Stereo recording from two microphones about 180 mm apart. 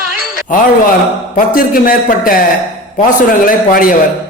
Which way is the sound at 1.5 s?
55° left (ahead or behind).